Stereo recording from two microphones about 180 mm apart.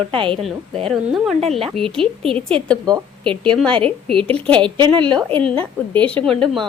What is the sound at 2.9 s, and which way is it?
A woman's voice, 30° right (ahead or behind).